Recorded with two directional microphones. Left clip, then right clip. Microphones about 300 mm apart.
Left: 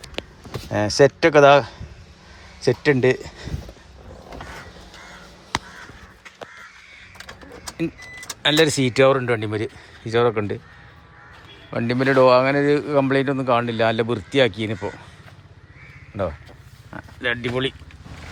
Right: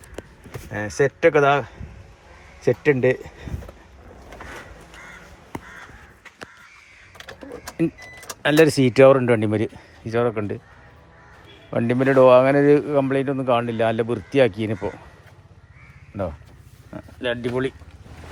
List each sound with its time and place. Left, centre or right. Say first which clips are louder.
0.7 s speech: left 6 dB; centre
8.4 s speech: right 1 dB; centre
11.7 s speech: right 1 dB; centre
16.9 s speech: left 1 dB; centre